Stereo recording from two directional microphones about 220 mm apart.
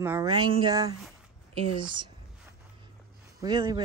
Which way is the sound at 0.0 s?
15° right (ahead or behind).